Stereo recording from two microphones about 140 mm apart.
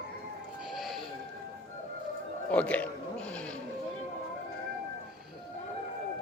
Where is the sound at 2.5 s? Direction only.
10° left (ahead or behind).